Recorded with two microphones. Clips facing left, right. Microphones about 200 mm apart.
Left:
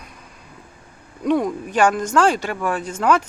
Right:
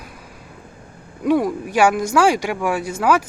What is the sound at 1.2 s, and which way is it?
Speech, 10° right (ahead or behind).